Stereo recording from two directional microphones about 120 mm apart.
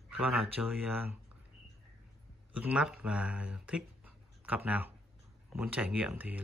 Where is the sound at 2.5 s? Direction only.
10° right (ahead or behind).